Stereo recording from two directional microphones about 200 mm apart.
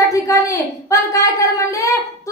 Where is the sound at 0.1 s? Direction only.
15° left (ahead or behind).